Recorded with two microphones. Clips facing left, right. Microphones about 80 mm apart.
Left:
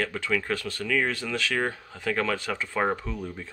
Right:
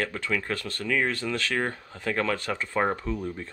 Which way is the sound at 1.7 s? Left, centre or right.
Centre.